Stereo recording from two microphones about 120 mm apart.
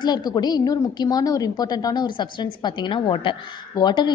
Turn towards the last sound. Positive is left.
turn(degrees=35)  # may be behind; listen again after turning